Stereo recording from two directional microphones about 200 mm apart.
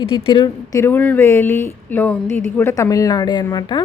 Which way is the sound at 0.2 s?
25° left (ahead or behind).